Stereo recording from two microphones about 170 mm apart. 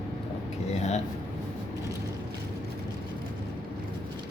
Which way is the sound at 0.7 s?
40° left (ahead or behind).